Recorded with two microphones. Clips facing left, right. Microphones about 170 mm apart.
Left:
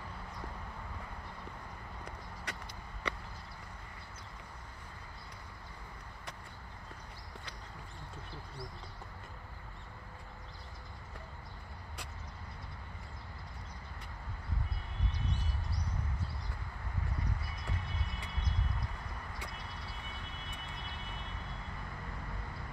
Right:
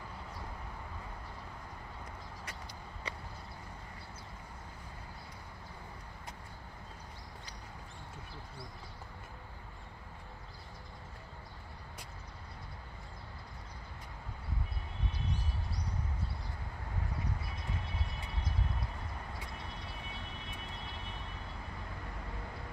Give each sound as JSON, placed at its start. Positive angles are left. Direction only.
{"t": 2.5, "sound": "vehicle", "side_deg": 75}
{"t": 3.1, "sound": "vehicle", "side_deg": 65}